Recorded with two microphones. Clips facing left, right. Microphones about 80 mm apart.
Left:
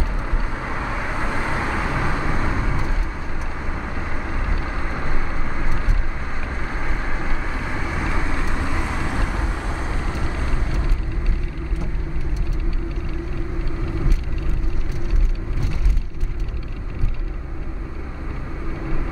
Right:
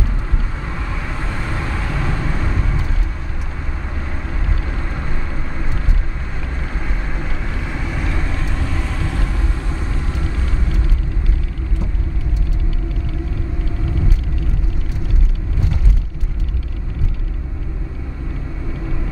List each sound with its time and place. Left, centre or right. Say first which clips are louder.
0.7 s vehicle: left 3 dB; centre
7.5 s vehicle: right 1 dB; centre